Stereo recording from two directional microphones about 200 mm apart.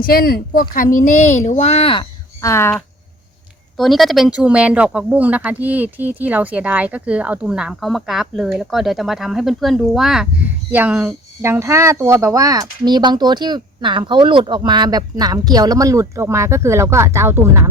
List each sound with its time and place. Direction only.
0.0 s speech: 45° left (ahead or behind); by 2.0 s 25° left (ahead or behind)
2.4 s speech: 15° left (ahead or behind)
3.8 s speech: centre (ahead or behind)